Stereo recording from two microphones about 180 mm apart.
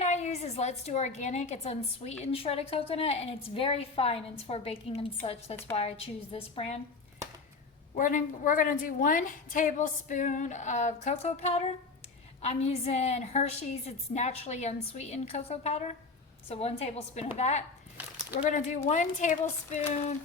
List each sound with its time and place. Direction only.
0.0 s a woman's voice: 40° left (ahead or behind)
7.9 s a woman's voice: 45° left (ahead or behind)